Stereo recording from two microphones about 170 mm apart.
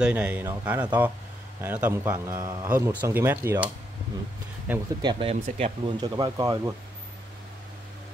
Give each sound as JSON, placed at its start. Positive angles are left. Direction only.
{"t": 0.0, "sound": "speech", "side_deg": -10}
{"t": 5.0, "sound": "speech", "side_deg": -35}
{"t": 5.9, "sound": "speech", "side_deg": -25}